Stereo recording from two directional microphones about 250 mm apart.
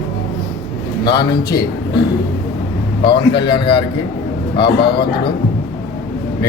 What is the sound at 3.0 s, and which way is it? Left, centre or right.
Speech, centre.